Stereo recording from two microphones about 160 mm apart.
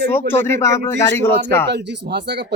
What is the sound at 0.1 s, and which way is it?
Speech, 15° left (ahead or behind).